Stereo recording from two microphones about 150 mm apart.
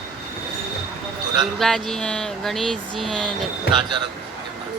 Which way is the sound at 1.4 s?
Centre (ahead or behind).